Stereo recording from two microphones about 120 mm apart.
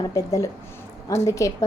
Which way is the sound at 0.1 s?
30° left (ahead or behind).